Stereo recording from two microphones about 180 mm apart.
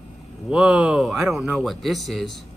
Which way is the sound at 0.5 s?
5° right (ahead or behind).